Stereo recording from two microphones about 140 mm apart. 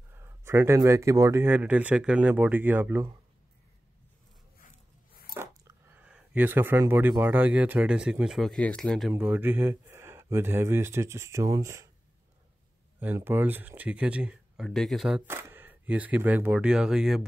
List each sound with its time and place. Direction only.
0.1 s speech: 20° right (ahead or behind)
4.6 s a sound: 90° left
5.3 s speech: 20° right (ahead or behind); by 9.1 s 5° left (ahead or behind)
9.1 s speech: 15° right (ahead or behind)
13.0 s speech: 15° right (ahead or behind)
15.2 s speech: 15° right (ahead or behind)